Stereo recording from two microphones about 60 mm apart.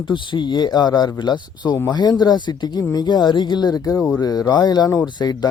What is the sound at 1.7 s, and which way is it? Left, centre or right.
Speech, left.